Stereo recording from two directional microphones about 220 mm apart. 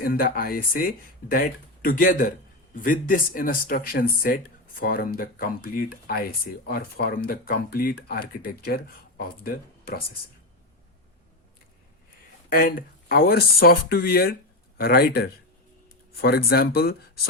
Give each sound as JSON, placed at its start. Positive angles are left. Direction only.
{"t": 0.0, "sound": "speech", "side_deg": 40}
{"t": 12.5, "sound": "speech", "side_deg": 40}